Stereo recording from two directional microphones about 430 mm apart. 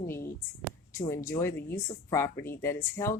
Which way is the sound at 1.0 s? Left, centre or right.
Centre.